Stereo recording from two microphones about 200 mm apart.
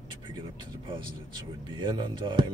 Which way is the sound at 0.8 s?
25° right (ahead or behind).